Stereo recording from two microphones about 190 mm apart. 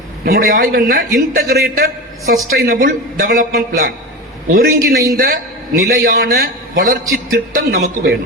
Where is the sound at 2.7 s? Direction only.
50° right (ahead or behind).